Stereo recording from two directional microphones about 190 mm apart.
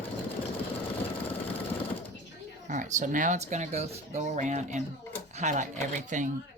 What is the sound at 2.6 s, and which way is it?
Speech, 40° right (ahead or behind).